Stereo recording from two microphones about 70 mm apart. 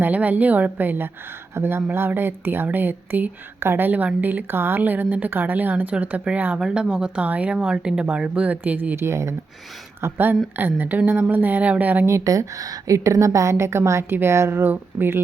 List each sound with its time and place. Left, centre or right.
0.0 s a woman's voice: right
9.0 s speech: right
10.0 s a woman's voice: right
12.0 s a woman's voice: right